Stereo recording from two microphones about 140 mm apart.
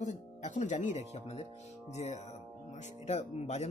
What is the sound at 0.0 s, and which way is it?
Speech, 60° left (ahead or behind).